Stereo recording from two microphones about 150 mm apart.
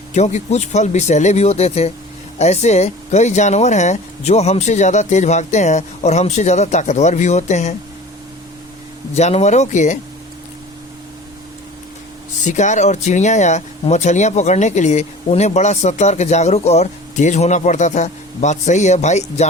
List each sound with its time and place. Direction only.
0.1 s speech: 50° left (ahead or behind)
9.1 s speech: 45° left (ahead or behind)
12.4 s speech: 55° left (ahead or behind)